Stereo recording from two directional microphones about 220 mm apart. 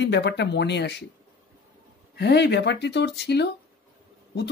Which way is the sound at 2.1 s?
50° left (ahead or behind).